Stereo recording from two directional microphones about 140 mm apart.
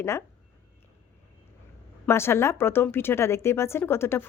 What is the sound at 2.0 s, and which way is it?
Speech, 15° left (ahead or behind).